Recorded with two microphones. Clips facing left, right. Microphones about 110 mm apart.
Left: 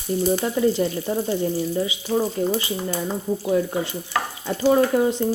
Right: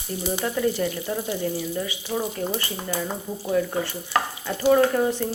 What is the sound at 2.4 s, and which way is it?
Speech, 25° left (ahead or behind).